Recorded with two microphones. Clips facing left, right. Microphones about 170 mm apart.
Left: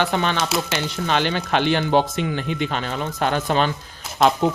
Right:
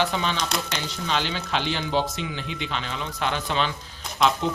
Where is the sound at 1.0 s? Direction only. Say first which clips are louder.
Left 5 dB; 55° left (ahead or behind).